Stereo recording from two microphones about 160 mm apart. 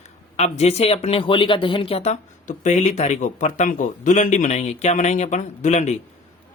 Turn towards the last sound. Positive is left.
turn(degrees=45)  # may be behind; listen again after turning